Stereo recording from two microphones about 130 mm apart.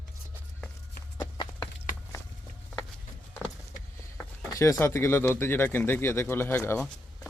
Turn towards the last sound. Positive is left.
turn(degrees=20)  # may be behind; listen again after turning